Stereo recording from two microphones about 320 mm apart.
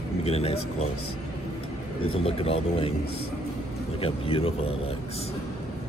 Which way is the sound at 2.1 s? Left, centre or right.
Centre.